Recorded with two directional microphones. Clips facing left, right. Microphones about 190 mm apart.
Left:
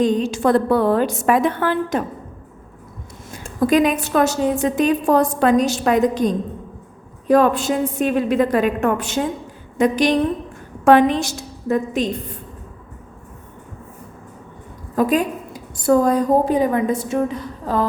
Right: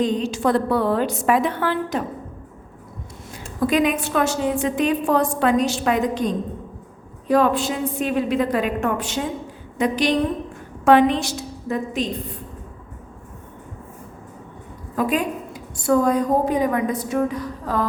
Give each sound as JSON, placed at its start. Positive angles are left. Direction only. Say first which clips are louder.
{"t": 0.0, "sound": "a woman's voice", "louder": "left 3 dB", "side_deg": 50}
{"t": 3.3, "sound": "a woman's voice", "louder": "left 4 dB", "side_deg": 40}
{"t": 14.9, "sound": "a woman's voice", "louder": "left 4 dB", "side_deg": 35}